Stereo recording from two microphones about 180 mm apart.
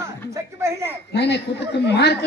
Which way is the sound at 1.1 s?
70° left (ahead or behind).